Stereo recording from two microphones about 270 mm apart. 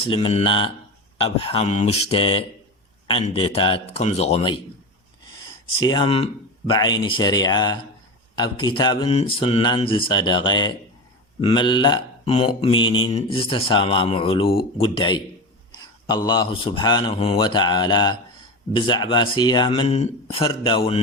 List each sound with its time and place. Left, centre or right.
0.0 s a man's voice: centre
5.8 s a man's voice: centre